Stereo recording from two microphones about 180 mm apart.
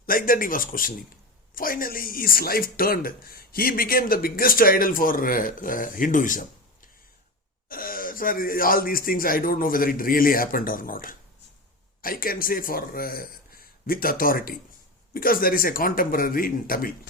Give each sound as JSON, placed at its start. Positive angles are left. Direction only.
{"t": 0.0, "sound": "speech", "side_deg": 55}
{"t": 7.7, "sound": "speech", "side_deg": 50}